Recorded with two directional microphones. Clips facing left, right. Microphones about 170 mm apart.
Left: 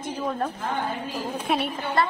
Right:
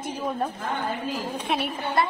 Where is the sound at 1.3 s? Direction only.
Centre (ahead or behind).